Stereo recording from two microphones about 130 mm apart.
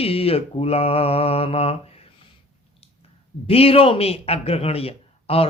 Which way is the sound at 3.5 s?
50° left (ahead or behind).